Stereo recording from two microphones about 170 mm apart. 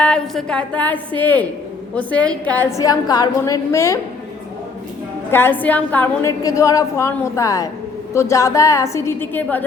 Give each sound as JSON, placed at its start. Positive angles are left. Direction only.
{"t": 0.0, "sound": "a woman's voice", "side_deg": 5}
{"t": 5.3, "sound": "a woman's voice", "side_deg": 10}
{"t": 6.4, "sound": "a woman's voice", "side_deg": 20}